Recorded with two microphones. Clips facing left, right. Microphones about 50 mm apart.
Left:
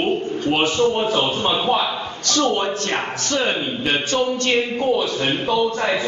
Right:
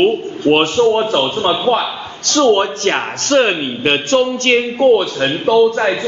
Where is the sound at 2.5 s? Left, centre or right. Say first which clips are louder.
Right 8 dB; right.